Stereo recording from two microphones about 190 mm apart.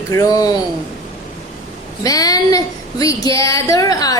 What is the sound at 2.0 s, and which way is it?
A woman's voice, 20° left (ahead or behind).